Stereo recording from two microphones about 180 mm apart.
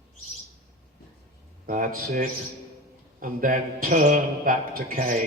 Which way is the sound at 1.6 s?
50° right (ahead or behind).